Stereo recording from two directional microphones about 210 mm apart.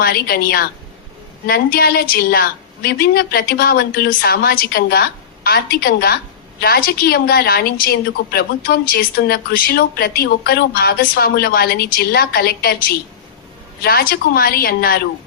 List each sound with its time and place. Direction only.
0.0 s a woman's voice: 45° left (ahead or behind)